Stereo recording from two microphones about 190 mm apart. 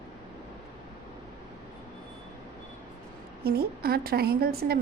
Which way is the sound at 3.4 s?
55° right (ahead or behind).